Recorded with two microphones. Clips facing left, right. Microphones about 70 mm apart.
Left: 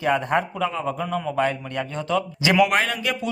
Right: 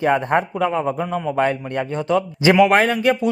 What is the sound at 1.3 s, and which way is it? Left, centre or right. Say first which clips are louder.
Speech: right 5 dB; right.